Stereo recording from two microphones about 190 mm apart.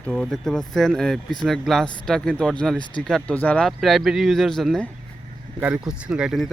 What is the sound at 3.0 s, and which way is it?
Speech, 5° left (ahead or behind).